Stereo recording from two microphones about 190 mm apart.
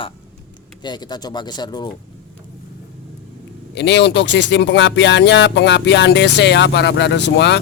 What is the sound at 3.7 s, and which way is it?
Speech, 65° left (ahead or behind).